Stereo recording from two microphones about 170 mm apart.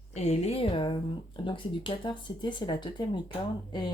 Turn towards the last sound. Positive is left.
turn(degrees=25)  # may be behind; listen again after turning